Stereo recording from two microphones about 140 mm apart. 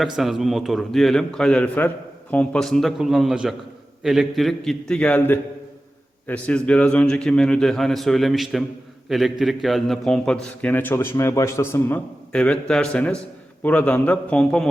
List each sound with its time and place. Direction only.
0.0 s a man's voice: centre (ahead or behind); by 11.9 s 15° left (ahead or behind)
12.3 s a man's voice: 5° left (ahead or behind)